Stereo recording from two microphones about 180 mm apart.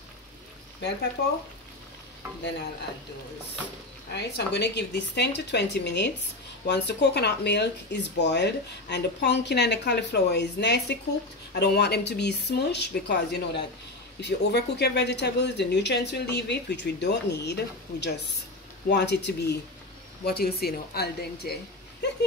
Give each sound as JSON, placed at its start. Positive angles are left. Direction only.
{"t": 4.1, "sound": "speech", "side_deg": 70}